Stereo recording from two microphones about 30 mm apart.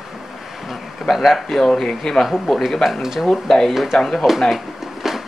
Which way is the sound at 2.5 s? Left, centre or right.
Centre.